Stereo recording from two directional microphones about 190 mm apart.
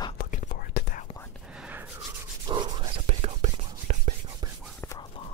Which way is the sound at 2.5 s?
25° right (ahead or behind).